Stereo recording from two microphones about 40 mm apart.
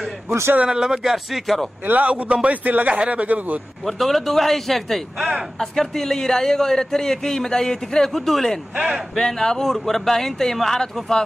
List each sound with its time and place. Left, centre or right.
0.6 s speech: centre
1.1 s a man's voice: centre
2.0 s speech: right
3.8 s a man's voice: centre
8.7 s speech: centre
9.1 s a man's voice: centre